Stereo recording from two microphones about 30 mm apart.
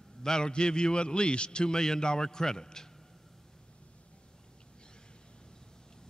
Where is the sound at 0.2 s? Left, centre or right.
Left.